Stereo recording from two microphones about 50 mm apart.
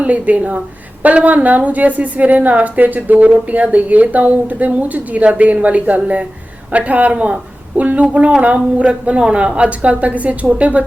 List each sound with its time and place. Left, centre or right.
0.0 s a woman's voice: right